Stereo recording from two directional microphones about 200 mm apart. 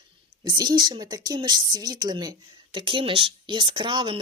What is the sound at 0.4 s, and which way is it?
Speech, 20° right (ahead or behind).